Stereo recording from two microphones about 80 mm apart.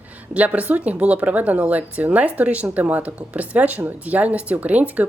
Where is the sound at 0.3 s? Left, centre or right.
Centre.